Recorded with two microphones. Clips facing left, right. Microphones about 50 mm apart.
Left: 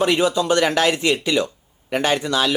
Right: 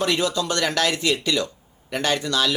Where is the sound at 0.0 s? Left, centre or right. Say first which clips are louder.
Left 4 dB; centre.